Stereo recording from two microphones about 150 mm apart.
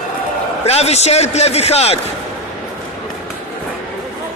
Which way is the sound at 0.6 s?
45° left (ahead or behind).